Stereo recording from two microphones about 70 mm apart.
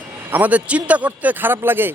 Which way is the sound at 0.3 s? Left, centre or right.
Right.